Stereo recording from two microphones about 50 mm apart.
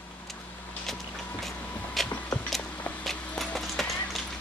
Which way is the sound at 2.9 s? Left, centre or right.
Left.